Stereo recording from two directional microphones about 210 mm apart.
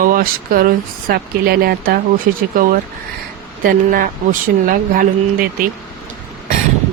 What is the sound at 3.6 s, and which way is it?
Speech, 40° right (ahead or behind).